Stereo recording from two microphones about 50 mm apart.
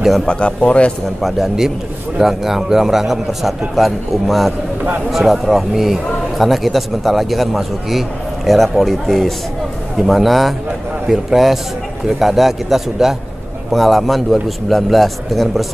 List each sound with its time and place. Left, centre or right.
0.3 s speech: centre
1.2 s a man's voice: centre